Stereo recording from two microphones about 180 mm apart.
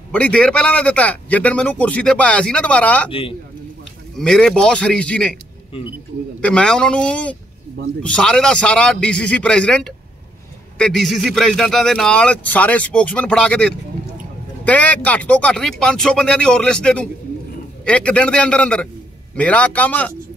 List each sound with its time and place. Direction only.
0.1 s a man's voice: 5° left (ahead or behind)
3.1 s a man's voice: 30° left (ahead or behind)
4.2 s speech: 5° left (ahead or behind)
6.4 s a man's voice: 5° left (ahead or behind)